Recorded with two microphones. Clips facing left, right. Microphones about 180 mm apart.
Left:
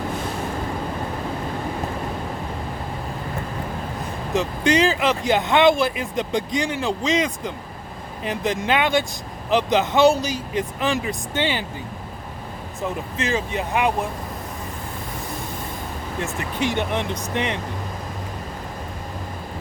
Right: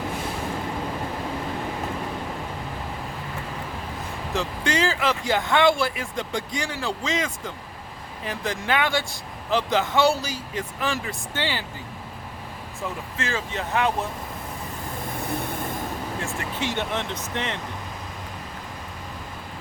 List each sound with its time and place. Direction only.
4.4 s speech: 20° left (ahead or behind)
12.8 s speech: 20° left (ahead or behind)
16.2 s speech: 15° left (ahead or behind)